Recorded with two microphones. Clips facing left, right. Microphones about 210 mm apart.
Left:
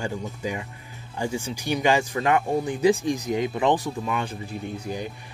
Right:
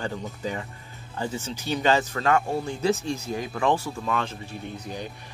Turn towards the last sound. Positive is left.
turn(degrees=10)  # may be behind; listen again after turning